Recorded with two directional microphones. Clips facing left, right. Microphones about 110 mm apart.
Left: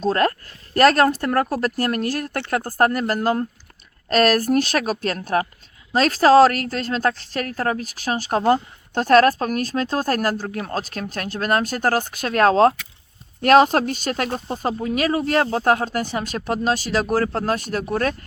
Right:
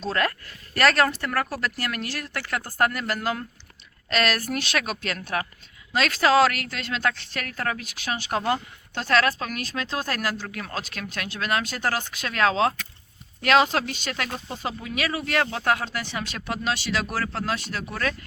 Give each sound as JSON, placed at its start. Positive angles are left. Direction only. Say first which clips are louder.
{"t": 0.0, "sound": "a woman's voice", "louder": "left 7 dB", "side_deg": 40}